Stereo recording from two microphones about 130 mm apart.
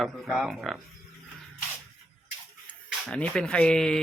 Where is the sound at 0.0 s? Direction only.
Centre (ahead or behind).